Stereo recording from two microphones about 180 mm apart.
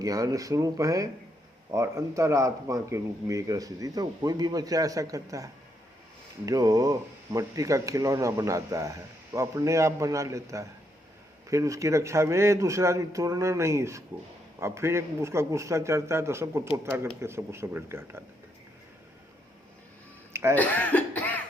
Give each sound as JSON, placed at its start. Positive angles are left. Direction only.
{"t": 0.0, "sound": "speech", "side_deg": -20}
{"t": 20.3, "sound": "a sound", "side_deg": -15}
{"t": 20.6, "sound": "cough", "side_deg": 10}